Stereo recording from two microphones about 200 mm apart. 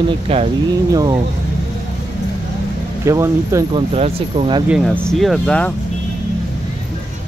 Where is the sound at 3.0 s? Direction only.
15° right (ahead or behind).